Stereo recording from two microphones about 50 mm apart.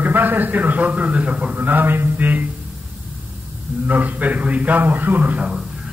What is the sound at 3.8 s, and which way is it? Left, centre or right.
A man's voice, right.